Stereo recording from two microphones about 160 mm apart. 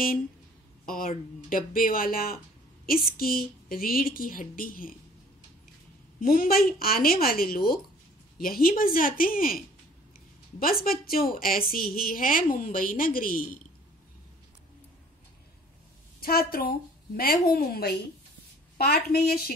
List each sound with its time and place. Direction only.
0.8 s a woman's voice: 60° left (ahead or behind)
6.2 s a woman's voice: 65° left (ahead or behind)
10.6 s a woman's voice: 65° left (ahead or behind)
16.2 s a woman's voice: 70° left (ahead or behind)